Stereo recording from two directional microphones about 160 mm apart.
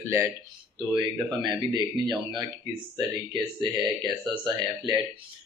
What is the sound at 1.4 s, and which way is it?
Speech, 25° right (ahead or behind).